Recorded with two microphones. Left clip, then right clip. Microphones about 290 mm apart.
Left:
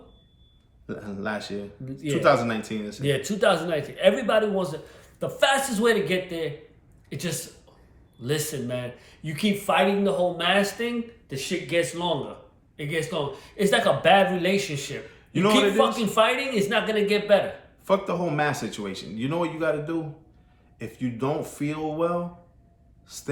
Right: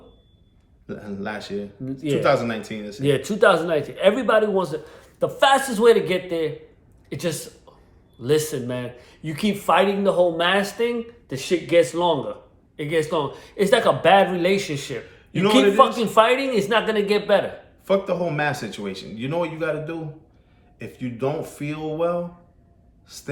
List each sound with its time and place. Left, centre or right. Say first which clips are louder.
0.9 s a man's voice: even; centre
3.0 s speech: right 6 dB; centre
17.8 s a man's voice: right 3 dB; centre
23.0 s a sound: even; centre